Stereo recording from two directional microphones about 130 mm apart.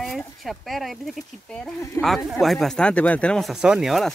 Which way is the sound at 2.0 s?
Centre (ahead or behind).